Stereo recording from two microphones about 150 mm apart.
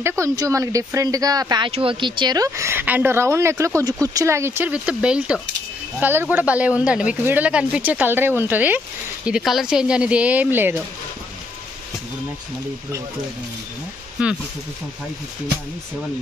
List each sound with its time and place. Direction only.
0.0 s speech: 20° right (ahead or behind)
1.7 s speech: 35° right (ahead or behind); by 10.8 s 15° right (ahead or behind)
14.2 s speech: 10° right (ahead or behind)